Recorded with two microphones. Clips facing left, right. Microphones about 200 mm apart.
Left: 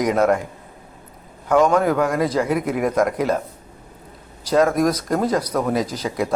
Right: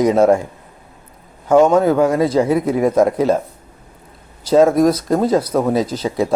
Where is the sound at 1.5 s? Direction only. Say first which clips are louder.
Right 5 dB; 25° right (ahead or behind).